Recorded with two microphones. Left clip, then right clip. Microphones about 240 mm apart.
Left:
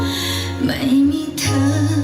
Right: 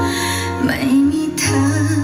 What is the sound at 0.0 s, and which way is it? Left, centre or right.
Music, centre.